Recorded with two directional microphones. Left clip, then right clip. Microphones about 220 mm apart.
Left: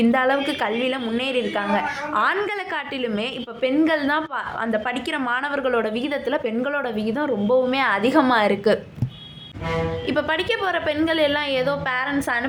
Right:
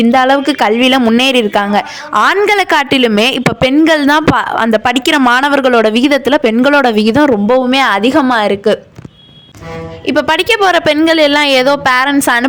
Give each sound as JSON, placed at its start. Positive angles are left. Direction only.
{"t": 0.0, "sound": "speech", "side_deg": -40}
{"t": 10.1, "sound": "a woman's voice", "side_deg": -40}